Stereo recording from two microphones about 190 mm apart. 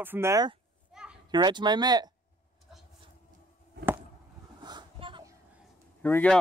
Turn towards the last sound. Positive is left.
turn(degrees=10)  # may be behind; listen again after turning